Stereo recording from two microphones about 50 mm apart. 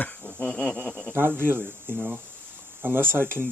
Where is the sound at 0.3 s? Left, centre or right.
Left.